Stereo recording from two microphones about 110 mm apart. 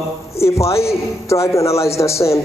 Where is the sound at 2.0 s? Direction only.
40° left (ahead or behind).